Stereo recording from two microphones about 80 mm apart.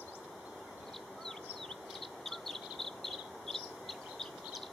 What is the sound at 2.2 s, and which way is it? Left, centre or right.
Bird, centre.